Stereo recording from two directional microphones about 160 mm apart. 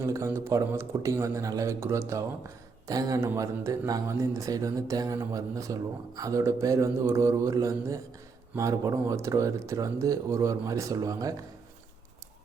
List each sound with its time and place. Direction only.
0.0 s speech: 15° right (ahead or behind)